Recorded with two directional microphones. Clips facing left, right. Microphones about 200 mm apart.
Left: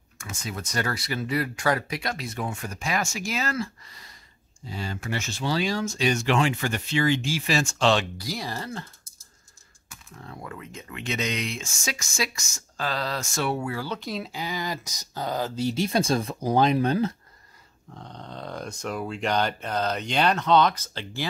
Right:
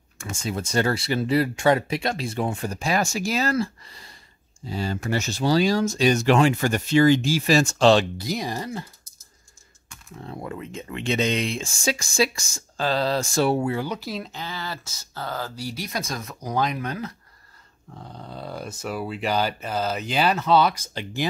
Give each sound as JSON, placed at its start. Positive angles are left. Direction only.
{"t": 0.2, "sound": "speech", "side_deg": -30}
{"t": 8.3, "sound": "speech", "side_deg": -15}
{"t": 10.2, "sound": "speech", "side_deg": -25}
{"t": 13.9, "sound": "speech", "side_deg": 0}
{"t": 14.3, "sound": "speech", "side_deg": 15}
{"t": 17.9, "sound": "speech", "side_deg": -5}